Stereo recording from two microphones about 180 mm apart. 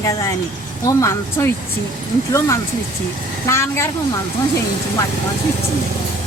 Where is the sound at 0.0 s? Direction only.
20° left (ahead or behind).